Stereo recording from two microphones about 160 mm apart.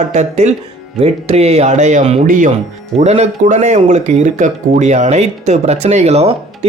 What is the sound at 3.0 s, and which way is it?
Speech, 45° right (ahead or behind).